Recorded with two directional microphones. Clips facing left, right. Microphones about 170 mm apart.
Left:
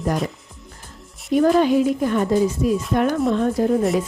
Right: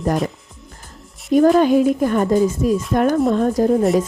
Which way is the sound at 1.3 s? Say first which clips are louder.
Right 3 dB; 45° right (ahead or behind).